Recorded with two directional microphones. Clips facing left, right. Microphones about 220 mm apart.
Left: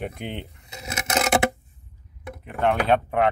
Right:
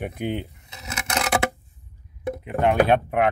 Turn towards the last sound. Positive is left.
turn(degrees=-10)  # may be behind; listen again after turning